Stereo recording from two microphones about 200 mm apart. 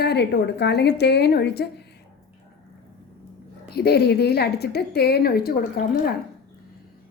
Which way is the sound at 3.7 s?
55° left (ahead or behind).